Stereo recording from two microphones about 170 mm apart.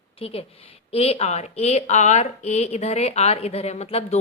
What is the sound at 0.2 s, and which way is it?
A woman's voice, 35° left (ahead or behind).